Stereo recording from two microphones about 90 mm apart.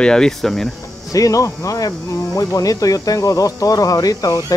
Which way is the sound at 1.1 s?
40° left (ahead or behind).